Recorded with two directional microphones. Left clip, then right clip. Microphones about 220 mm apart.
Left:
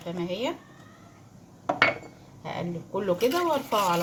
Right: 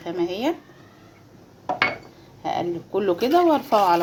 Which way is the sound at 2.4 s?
35° right (ahead or behind).